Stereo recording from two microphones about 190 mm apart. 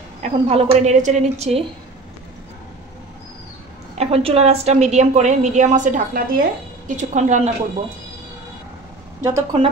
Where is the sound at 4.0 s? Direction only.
30° right (ahead or behind).